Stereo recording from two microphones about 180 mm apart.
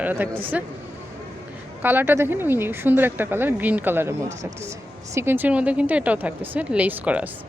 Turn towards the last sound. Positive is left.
turn(degrees=-10)  # may be behind; listen again after turning